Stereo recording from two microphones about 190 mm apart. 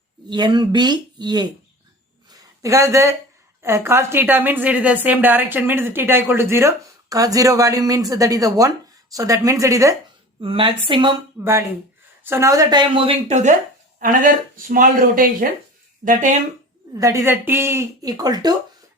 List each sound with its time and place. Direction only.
0.3 s speech: 25° right (ahead or behind)
2.3 s a sound: 15° right (ahead or behind)
3.6 s a woman's voice: 15° right (ahead or behind)
10.4 s speech: 30° right (ahead or behind)
12.2 s speech: 15° right (ahead or behind); by 16.4 s 40° right (ahead or behind)
16.9 s a woman's voice: 15° right (ahead or behind)